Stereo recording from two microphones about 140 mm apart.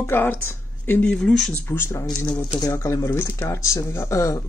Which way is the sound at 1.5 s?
15° left (ahead or behind).